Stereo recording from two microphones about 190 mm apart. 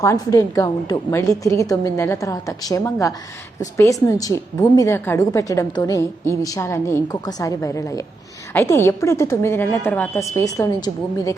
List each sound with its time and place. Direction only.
0.0 s a woman's voice: 15° left (ahead or behind)